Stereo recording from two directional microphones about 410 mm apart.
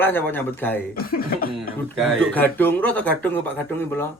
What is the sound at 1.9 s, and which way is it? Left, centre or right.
Speech, centre.